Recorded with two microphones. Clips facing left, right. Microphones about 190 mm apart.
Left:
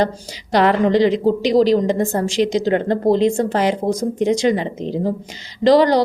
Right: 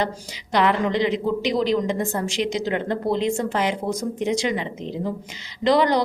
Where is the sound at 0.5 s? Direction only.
35° left (ahead or behind).